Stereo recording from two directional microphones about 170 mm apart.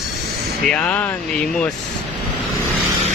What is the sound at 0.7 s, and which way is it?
Speech, 10° left (ahead or behind).